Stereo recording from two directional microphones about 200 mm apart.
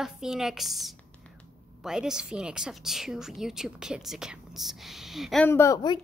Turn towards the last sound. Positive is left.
turn(degrees=20)  # may be behind; listen again after turning